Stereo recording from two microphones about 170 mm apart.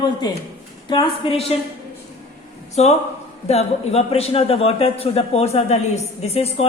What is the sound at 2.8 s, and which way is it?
A man's voice, 40° left (ahead or behind).